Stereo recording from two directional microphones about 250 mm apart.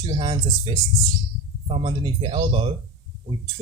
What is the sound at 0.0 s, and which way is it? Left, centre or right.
Speech, centre.